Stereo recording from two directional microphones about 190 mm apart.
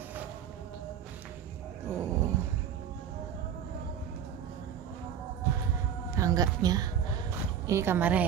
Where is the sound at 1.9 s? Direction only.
10° right (ahead or behind).